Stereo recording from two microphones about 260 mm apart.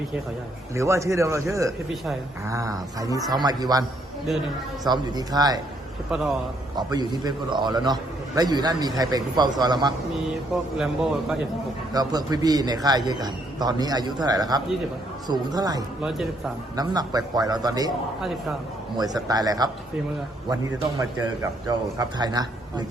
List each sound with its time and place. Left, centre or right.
0.8 s a man's voice: centre
6.1 s speech: centre
6.7 s a man's voice: centre
11.9 s a man's voice: centre
16.0 s speech: centre
16.7 s a man's voice: centre
18.9 s a man's voice: centre